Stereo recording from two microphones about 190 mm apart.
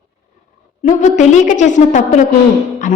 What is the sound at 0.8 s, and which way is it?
A woman's voice, 40° left (ahead or behind).